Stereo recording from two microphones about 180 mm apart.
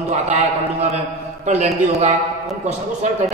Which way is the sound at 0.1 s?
35° right (ahead or behind).